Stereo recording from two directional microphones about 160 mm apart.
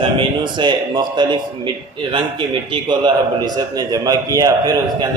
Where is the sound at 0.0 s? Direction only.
30° right (ahead or behind).